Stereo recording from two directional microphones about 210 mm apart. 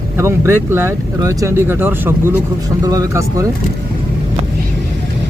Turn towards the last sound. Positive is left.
turn(degrees=-15)  # may be behind; listen again after turning